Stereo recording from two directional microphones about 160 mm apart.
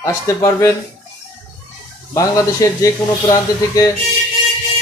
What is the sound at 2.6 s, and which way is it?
Speech, 20° left (ahead or behind).